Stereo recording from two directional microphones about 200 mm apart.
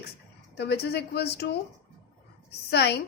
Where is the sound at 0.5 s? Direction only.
55° left (ahead or behind).